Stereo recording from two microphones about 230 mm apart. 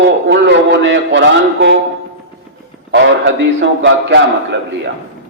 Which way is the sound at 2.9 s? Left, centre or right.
Right.